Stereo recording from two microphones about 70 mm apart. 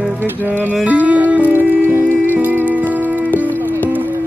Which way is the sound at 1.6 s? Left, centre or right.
Right.